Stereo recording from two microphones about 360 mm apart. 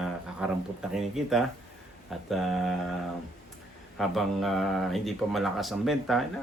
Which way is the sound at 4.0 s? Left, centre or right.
Centre.